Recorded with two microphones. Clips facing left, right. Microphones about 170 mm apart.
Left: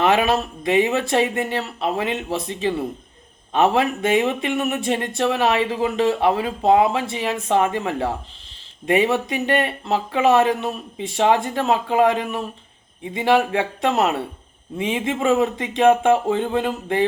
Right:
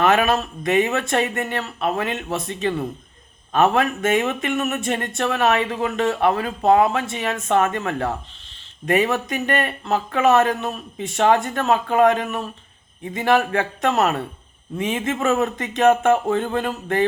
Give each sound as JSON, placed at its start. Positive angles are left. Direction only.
{"t": 0.0, "sound": "speech", "side_deg": 25}
{"t": 1.2, "sound": "speech", "side_deg": 10}
{"t": 1.5, "sound": "speech", "side_deg": 25}